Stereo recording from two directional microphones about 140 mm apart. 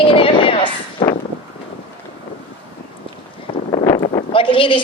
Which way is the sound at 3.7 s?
45° left (ahead or behind).